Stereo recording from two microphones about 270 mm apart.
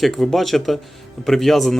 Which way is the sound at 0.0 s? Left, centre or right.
Centre.